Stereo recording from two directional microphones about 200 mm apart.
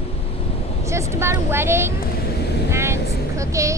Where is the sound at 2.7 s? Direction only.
15° right (ahead or behind).